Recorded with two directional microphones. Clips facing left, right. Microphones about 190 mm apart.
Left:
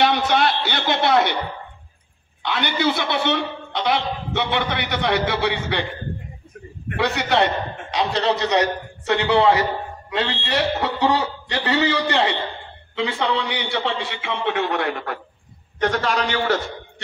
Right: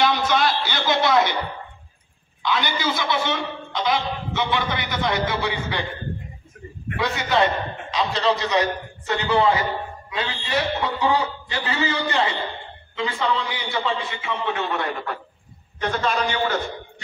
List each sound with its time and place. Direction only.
0.0 s a man's voice: 60° left (ahead or behind)
2.4 s a man's voice: 60° left (ahead or behind)
7.0 s a man's voice: 65° left (ahead or behind); by 16.5 s 85° left